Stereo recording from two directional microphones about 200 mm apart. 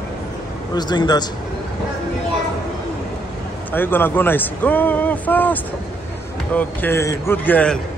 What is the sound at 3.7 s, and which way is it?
Speech, 10° left (ahead or behind).